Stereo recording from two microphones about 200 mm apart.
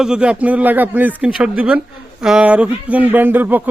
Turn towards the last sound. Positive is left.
turn(degrees=-10)  # may be behind; listen again after turning